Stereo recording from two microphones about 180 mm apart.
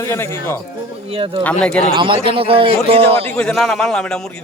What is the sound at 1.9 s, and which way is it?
A man's voice, 30° right (ahead or behind).